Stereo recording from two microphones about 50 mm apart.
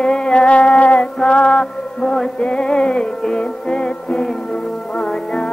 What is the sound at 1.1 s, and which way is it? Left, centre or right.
Music, centre.